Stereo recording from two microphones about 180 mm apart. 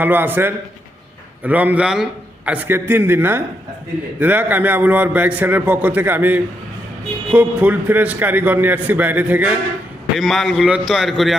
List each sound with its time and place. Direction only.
0.0 s a man's voice: 10° right (ahead or behind)